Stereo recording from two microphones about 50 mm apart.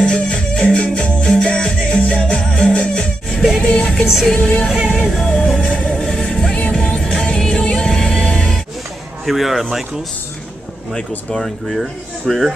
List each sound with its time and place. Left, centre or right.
0.0 s music: centre
4.0 s music: centre
4.3 s music: centre
5.6 s music: left
6.0 s music: centre
6.5 s music: centre
9.2 s a man's voice: centre
10.9 s speech: centre